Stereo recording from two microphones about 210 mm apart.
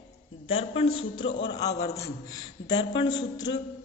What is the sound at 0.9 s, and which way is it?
Music, 75° left (ahead or behind).